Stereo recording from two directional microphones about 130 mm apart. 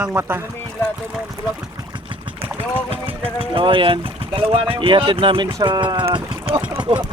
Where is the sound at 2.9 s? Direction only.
45° right (ahead or behind).